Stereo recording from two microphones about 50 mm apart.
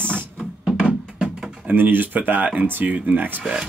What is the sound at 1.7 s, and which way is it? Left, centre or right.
Speech, right.